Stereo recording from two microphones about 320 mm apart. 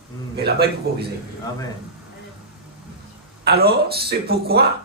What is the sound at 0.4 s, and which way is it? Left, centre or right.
Speech, right.